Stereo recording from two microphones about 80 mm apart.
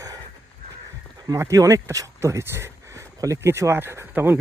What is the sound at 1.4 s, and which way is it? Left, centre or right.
Speech, right.